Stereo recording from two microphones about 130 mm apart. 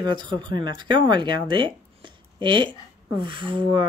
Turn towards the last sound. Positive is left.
turn(degrees=-40)  # may be behind; listen again after turning